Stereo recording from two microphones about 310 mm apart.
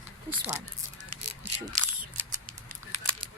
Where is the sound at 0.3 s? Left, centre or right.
Centre.